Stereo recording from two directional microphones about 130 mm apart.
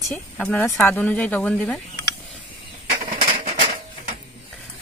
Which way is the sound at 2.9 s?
90° right.